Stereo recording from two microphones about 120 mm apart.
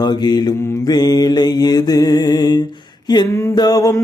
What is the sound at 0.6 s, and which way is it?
Mantra, 20° left (ahead or behind).